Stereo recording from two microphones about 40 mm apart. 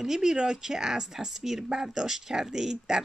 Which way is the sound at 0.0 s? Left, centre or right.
Centre.